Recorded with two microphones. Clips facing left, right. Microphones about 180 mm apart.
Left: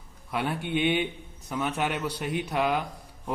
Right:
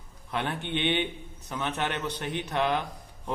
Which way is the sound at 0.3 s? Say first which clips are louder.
Left 2 dB; 10° left (ahead or behind).